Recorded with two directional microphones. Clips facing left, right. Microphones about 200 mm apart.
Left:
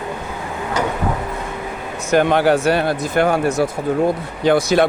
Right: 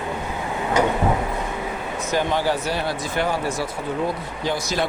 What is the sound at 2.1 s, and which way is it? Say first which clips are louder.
Speech: left 8 dB; 65° left (ahead or behind).